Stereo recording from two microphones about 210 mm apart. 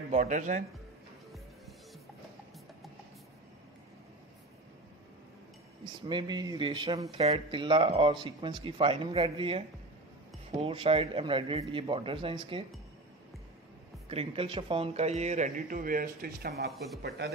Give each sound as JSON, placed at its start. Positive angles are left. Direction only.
{"t": 0.1, "sound": "a man's voice", "side_deg": -35}
{"t": 6.0, "sound": "speech", "side_deg": -20}
{"t": 10.6, "sound": "speech", "side_deg": -25}
{"t": 14.1, "sound": "a man's voice", "side_deg": -25}
{"t": 16.7, "sound": "speech", "side_deg": 0}